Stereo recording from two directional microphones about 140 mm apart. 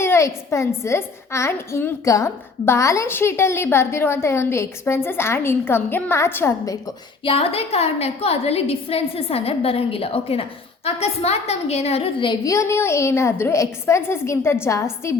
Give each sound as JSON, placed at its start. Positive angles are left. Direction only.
{"t": 0.0, "sound": "a child's voice", "side_deg": 20}
{"t": 7.3, "sound": "a woman's voice", "side_deg": 45}
{"t": 12.5, "sound": "a child's voice", "side_deg": 20}